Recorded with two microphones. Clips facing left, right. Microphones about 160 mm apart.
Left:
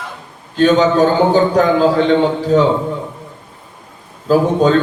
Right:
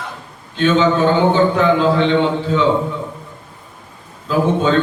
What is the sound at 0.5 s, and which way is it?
A man's voice, 40° left (ahead or behind).